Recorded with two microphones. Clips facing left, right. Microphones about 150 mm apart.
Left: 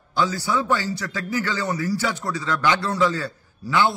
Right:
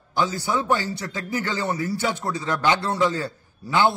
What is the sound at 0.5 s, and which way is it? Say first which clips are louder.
A man's voice: even; 20° right (ahead or behind).